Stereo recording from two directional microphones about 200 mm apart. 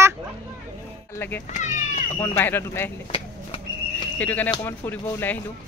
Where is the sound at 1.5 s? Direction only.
35° left (ahead or behind).